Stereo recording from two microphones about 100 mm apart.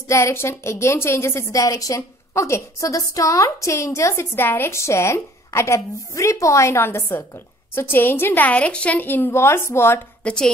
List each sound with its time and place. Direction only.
0.1 s a woman's voice: 25° left (ahead or behind)
10.2 s a woman's voice: 5° left (ahead or behind)